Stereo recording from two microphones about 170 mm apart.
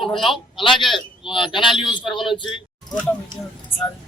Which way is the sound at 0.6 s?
30° left (ahead or behind).